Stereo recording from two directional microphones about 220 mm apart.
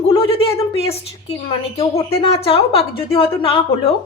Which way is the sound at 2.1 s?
25° left (ahead or behind).